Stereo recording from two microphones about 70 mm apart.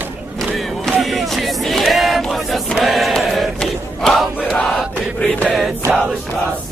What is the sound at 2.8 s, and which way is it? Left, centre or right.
Crowd, centre.